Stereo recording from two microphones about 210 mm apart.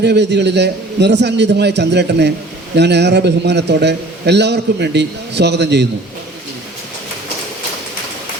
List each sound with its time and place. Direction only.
0.0 s a man's voice: 55° right (ahead or behind)